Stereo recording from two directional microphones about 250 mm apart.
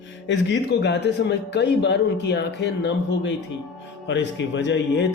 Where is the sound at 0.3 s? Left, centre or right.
Left.